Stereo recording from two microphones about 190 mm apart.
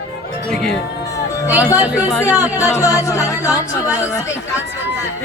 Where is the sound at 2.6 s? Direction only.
15° left (ahead or behind).